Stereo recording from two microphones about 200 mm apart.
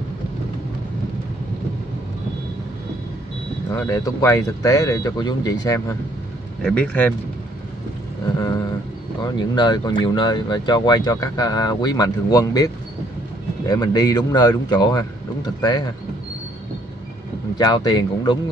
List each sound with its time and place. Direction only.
3.7 s speech: 15° left (ahead or behind)
6.6 s speech: 5° left (ahead or behind)
9.2 s speech: 20° left (ahead or behind)
17.6 s speech: 20° left (ahead or behind)